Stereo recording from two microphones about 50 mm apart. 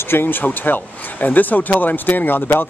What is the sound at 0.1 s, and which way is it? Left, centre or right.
Speech, left.